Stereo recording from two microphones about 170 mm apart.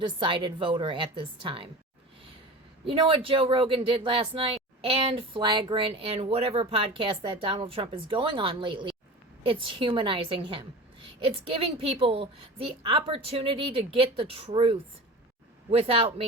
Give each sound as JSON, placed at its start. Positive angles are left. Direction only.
{"t": 0.0, "sound": "a woman's voice", "side_deg": -30}
{"t": 2.8, "sound": "a woman's voice", "side_deg": -30}